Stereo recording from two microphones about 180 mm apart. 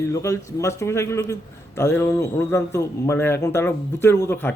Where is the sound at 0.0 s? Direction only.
15° left (ahead or behind).